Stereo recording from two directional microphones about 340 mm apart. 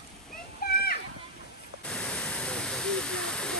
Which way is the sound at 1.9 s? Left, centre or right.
Centre.